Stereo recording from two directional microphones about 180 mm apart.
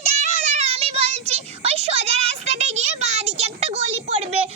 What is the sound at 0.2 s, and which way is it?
Child singing, 35° right (ahead or behind).